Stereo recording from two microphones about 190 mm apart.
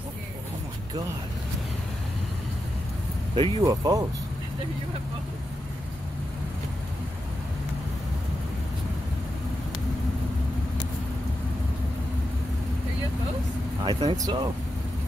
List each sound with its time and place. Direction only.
3.3 s speech: 25° right (ahead or behind)
13.8 s speech: 20° right (ahead or behind)